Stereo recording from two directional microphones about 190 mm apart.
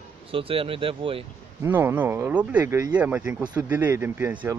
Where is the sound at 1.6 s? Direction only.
10° right (ahead or behind).